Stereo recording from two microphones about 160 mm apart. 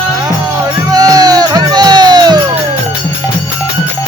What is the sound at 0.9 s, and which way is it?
Music, 25° right (ahead or behind).